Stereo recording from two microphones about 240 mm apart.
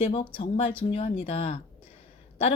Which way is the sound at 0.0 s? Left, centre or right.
Left.